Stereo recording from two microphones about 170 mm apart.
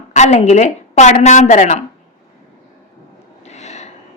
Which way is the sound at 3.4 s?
40° left (ahead or behind).